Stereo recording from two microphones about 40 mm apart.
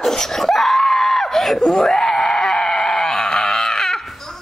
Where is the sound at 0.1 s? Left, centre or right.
Centre.